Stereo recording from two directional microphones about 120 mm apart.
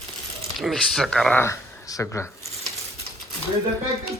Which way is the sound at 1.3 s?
25° left (ahead or behind).